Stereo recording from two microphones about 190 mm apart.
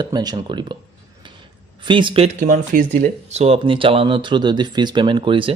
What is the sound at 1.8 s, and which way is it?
Speech, 25° right (ahead or behind).